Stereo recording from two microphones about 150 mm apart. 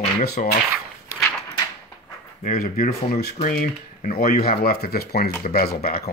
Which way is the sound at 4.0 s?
75° left (ahead or behind).